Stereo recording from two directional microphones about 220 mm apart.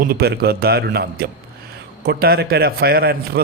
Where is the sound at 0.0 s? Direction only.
45° right (ahead or behind).